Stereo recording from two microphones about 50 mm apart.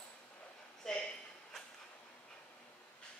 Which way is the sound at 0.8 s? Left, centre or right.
Centre.